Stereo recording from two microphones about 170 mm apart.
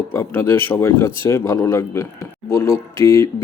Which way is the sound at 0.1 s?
15° left (ahead or behind).